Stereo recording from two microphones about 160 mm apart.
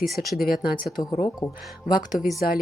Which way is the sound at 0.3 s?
70° left (ahead or behind).